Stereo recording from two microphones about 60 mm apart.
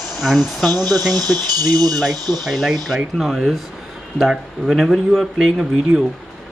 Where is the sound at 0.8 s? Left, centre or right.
Right.